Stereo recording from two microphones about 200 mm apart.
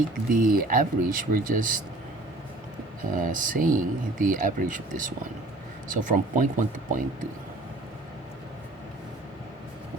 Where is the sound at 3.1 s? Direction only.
40° right (ahead or behind).